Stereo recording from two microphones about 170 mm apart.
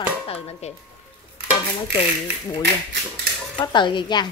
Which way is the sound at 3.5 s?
25° left (ahead or behind).